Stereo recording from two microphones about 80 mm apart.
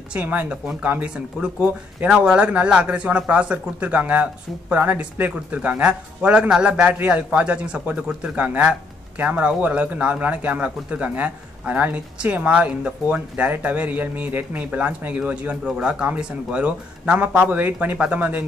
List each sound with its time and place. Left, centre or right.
0.1 s speech: right
1.1 s speech: centre